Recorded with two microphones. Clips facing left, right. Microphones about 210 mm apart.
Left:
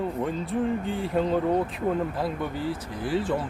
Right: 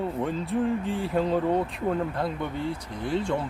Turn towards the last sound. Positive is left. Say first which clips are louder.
# left 1 dB
turn(degrees=5)  # may be behind; listen again after turning